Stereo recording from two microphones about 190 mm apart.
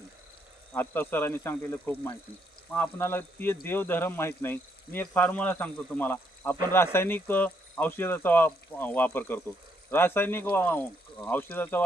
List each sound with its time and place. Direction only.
0.7 s speech: 10° left (ahead or behind)